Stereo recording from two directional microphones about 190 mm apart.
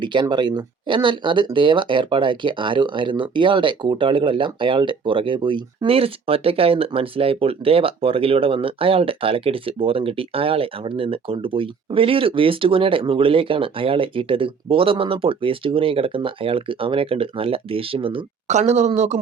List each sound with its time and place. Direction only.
0.0 s speech: 25° right (ahead or behind)